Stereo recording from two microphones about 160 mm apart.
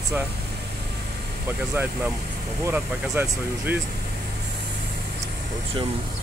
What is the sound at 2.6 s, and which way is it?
Speech, 15° right (ahead or behind).